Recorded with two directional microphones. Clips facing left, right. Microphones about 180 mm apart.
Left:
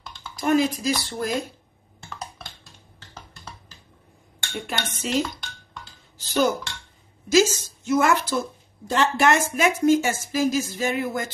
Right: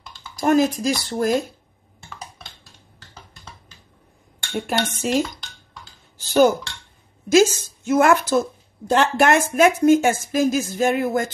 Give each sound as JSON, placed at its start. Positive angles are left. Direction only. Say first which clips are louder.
{"t": 0.4, "sound": "a woman's voice", "louder": "right 3 dB", "side_deg": -45}
{"t": 4.6, "sound": "a woman's voice", "louder": "right 7 dB", "side_deg": -45}
{"t": 6.2, "sound": "a woman's voice", "louder": "right 6 dB", "side_deg": -55}